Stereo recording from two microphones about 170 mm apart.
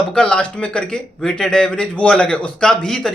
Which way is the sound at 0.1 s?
5° left (ahead or behind).